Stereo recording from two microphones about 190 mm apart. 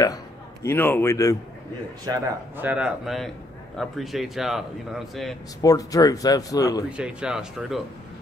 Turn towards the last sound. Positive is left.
turn(degrees=0)  # may be behind; listen again after turning